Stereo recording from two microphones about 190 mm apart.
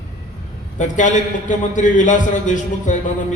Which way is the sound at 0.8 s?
40° left (ahead or behind).